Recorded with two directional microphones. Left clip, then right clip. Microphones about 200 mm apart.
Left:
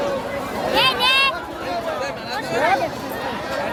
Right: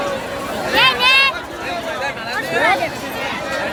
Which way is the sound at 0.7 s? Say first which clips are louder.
Right 4 dB; 15° right (ahead or behind).